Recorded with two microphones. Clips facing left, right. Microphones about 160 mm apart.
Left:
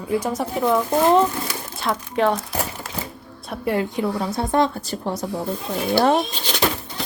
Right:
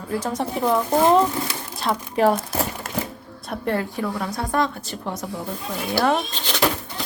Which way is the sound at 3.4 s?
Centre (ahead or behind).